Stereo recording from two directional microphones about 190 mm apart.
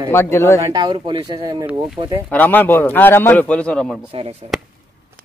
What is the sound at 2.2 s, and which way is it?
A man's voice, 10° left (ahead or behind).